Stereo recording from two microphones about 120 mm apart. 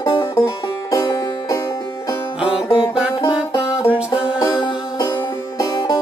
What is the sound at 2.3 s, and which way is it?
Music, 10° right (ahead or behind).